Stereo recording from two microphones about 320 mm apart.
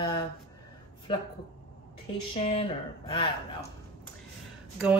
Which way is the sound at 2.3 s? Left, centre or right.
Centre.